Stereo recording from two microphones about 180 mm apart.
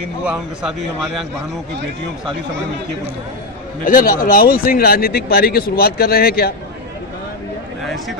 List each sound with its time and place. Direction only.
0.2 s a man's voice: 5° right (ahead or behind)
3.8 s speech: 50° left (ahead or behind)